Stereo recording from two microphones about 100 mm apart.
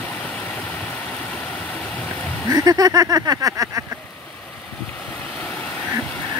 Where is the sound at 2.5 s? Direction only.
40° right (ahead or behind).